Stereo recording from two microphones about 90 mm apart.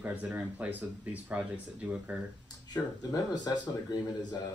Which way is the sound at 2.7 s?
50° left (ahead or behind).